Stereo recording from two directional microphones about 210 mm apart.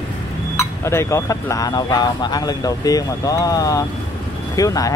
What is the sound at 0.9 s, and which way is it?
Speech, 15° left (ahead or behind).